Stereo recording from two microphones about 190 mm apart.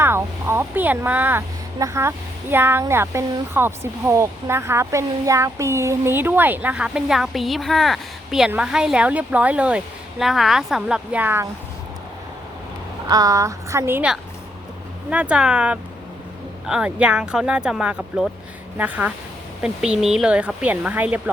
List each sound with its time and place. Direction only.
0.0 s speech: 10° right (ahead or behind)
13.1 s speech: 20° right (ahead or behind)